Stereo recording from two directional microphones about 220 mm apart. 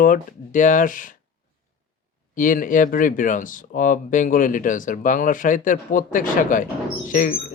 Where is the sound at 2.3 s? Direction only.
35° left (ahead or behind).